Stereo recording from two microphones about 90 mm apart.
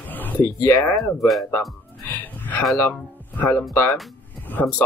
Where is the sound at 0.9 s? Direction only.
5° left (ahead or behind).